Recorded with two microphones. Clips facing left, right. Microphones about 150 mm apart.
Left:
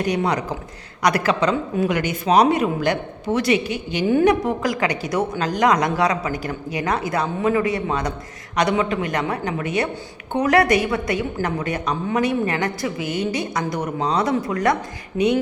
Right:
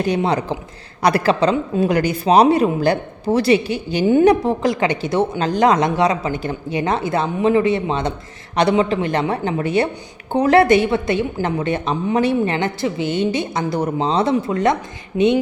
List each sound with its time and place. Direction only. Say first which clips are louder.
0.0 s speech: right 3 dB; 30° right (ahead or behind)